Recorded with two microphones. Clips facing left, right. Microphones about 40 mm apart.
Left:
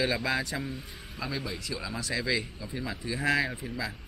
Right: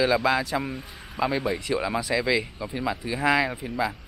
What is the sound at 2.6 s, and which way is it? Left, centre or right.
Speech, right.